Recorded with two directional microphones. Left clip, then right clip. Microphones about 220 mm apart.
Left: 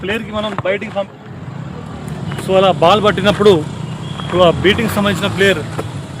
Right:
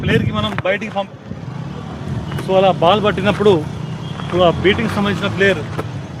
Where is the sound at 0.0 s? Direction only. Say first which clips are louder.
Right 1 dB; 45° right (ahead or behind).